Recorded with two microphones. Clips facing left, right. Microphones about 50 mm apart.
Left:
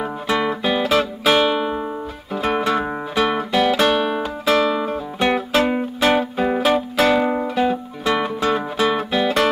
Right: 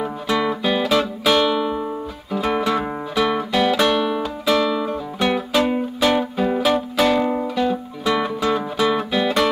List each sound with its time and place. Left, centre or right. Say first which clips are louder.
0.0 s music: even; centre